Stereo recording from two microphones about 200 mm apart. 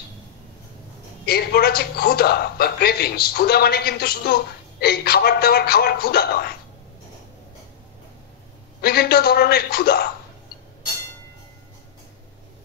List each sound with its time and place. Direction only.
1.2 s a man's voice: 50° left (ahead or behind)
8.8 s a man's voice: 50° left (ahead or behind)